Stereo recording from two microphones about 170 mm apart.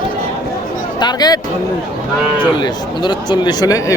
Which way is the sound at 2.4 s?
25° left (ahead or behind).